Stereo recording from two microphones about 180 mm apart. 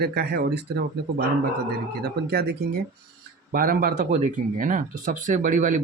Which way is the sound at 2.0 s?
65° right (ahead or behind).